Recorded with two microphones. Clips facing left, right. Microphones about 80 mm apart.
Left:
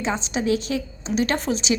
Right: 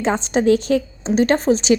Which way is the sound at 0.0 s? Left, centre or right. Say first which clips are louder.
Right 7 dB; right.